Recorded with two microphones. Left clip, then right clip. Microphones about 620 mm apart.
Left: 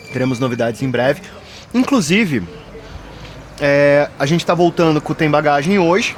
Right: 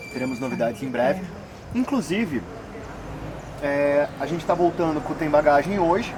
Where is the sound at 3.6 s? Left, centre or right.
Left.